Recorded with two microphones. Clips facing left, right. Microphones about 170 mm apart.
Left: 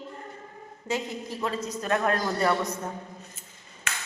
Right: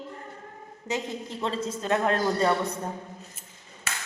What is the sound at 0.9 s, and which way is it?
A woman's voice, 25° right (ahead or behind).